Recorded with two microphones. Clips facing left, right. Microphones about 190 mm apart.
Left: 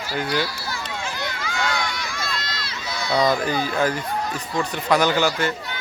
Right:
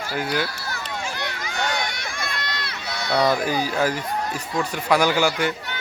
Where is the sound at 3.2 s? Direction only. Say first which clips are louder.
Right 1 dB; 10° right (ahead or behind).